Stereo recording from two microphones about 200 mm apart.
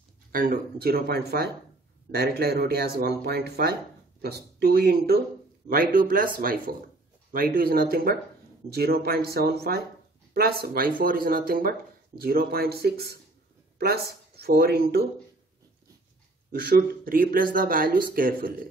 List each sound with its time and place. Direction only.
0.3 s speech: 45° right (ahead or behind)
16.7 s speech: 45° right (ahead or behind)